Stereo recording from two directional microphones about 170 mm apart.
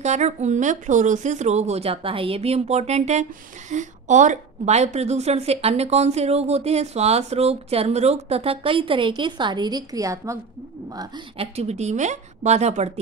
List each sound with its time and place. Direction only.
0.0 s a woman's voice: 40° right (ahead or behind); by 10.4 s 20° right (ahead or behind)
11.3 s a woman's voice: 40° right (ahead or behind)